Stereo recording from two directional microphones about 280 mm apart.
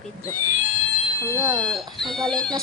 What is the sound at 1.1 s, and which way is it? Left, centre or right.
Speech, centre.